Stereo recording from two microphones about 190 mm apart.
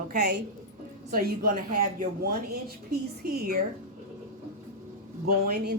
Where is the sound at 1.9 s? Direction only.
50° right (ahead or behind).